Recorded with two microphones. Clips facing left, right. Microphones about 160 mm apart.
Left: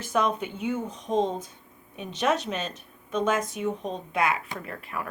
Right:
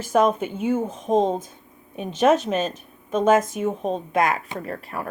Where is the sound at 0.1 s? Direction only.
50° right (ahead or behind).